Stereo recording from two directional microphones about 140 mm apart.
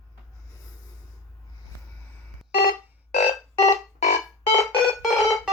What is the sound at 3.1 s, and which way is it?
Music, 60° left (ahead or behind).